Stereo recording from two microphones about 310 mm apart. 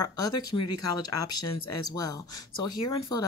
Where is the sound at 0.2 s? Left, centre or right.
Left.